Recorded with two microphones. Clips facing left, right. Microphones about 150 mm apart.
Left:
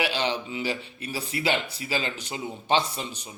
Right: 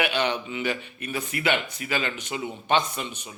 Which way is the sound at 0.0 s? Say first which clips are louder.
Right 2 dB; 30° left (ahead or behind).